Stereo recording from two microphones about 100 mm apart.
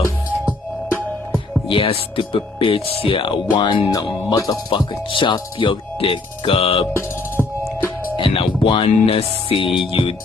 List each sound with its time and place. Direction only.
1.7 s speech: 60° left (ahead or behind)
4.3 s speech: 40° left (ahead or behind)
4.6 s speech: 55° left (ahead or behind)
7.4 s music: 10° left (ahead or behind)
8.2 s speech: 60° left (ahead or behind)